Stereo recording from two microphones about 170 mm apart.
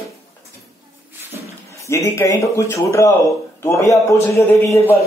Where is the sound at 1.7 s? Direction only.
15° left (ahead or behind).